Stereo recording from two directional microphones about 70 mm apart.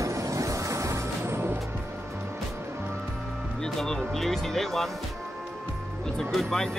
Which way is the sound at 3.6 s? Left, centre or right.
Centre.